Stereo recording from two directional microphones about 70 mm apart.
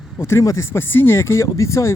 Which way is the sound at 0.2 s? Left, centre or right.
Left.